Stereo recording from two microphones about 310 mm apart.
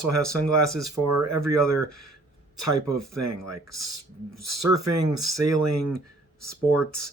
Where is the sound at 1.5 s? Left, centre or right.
Right.